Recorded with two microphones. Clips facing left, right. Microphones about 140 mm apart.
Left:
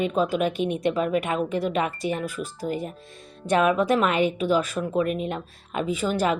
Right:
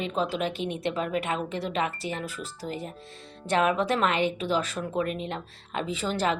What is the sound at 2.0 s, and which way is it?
Speech, 15° left (ahead or behind).